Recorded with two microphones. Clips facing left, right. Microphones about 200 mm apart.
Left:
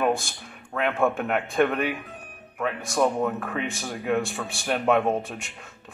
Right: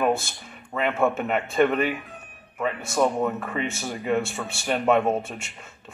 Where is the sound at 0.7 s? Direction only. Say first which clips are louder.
Right 1 dB; centre (ahead or behind).